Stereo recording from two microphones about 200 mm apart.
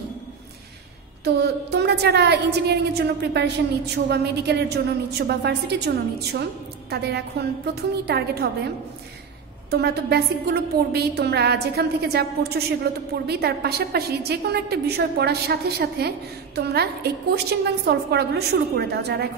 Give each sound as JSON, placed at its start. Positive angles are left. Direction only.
{"t": 1.2, "sound": "a woman's voice", "side_deg": -55}
{"t": 9.7, "sound": "a woman's voice", "side_deg": -55}